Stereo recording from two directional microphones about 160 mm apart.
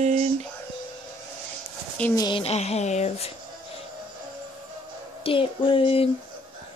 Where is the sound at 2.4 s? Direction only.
40° left (ahead or behind).